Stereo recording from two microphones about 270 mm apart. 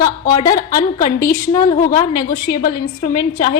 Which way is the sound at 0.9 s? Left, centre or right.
Left.